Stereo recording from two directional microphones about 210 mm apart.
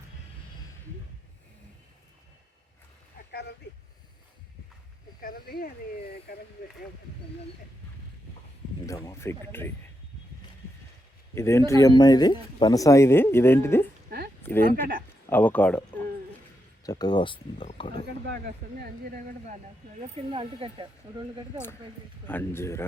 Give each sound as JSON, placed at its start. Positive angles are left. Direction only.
{"t": 5.2, "sound": "speech", "side_deg": 45}
{"t": 8.9, "sound": "speech", "side_deg": 15}
{"t": 11.3, "sound": "speech", "side_deg": 15}
{"t": 16.8, "sound": "speech", "side_deg": 20}
{"t": 18.6, "sound": "speech", "side_deg": -45}
{"t": 20.3, "sound": "speech", "side_deg": -25}
{"t": 22.3, "sound": "speech", "side_deg": 10}